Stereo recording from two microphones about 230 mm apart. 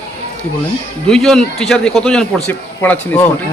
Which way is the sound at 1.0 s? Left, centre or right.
Centre.